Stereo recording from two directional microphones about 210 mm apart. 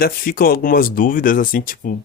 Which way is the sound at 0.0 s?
45° left (ahead or behind).